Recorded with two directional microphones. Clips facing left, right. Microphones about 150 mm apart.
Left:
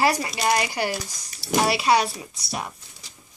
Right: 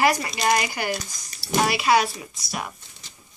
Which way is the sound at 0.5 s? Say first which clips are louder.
Left 1 dB; 30° left (ahead or behind).